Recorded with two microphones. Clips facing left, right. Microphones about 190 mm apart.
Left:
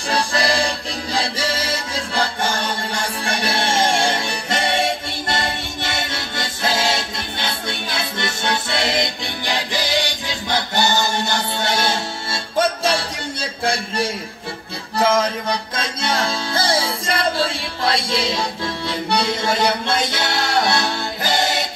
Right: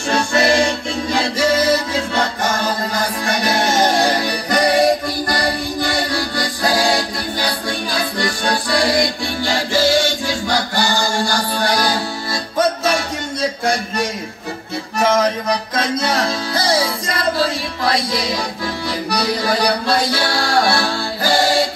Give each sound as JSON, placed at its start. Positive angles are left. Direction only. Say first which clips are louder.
{"t": 0.1, "sound": "music", "louder": "right 5 dB", "side_deg": 30}